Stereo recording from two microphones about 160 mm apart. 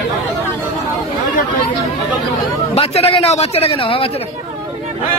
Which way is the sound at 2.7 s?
40° left (ahead or behind).